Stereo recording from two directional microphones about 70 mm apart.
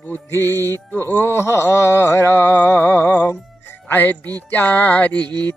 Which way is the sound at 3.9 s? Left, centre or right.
Left.